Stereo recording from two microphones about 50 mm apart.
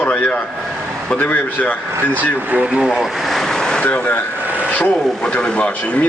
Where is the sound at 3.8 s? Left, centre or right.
Left.